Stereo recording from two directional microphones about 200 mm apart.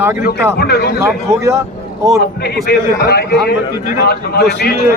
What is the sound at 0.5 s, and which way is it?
Speech, 55° left (ahead or behind).